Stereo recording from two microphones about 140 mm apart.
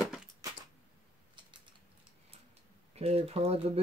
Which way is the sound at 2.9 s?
45° right (ahead or behind).